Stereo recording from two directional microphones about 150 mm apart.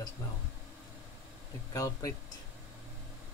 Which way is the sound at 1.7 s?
25° left (ahead or behind).